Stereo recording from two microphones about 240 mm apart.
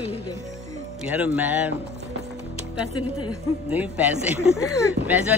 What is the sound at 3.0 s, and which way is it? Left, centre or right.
Speech, left.